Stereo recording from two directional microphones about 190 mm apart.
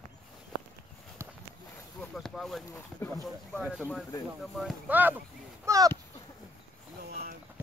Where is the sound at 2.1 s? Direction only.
Centre (ahead or behind).